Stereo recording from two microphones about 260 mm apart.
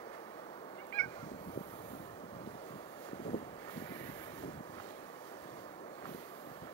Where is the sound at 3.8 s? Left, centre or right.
Centre.